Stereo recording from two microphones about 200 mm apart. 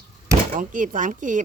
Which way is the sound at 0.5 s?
40° right (ahead or behind).